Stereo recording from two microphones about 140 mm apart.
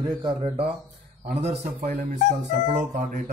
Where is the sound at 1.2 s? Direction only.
85° right; by 3.2 s 55° right (ahead or behind).